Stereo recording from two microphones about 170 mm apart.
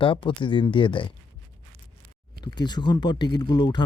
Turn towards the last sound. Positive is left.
turn(degrees=25)  # may be behind; listen again after turning